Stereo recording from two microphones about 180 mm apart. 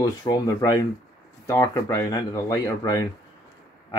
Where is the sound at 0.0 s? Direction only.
20° left (ahead or behind).